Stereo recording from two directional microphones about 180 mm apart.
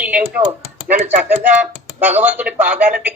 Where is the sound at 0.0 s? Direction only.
10° right (ahead or behind).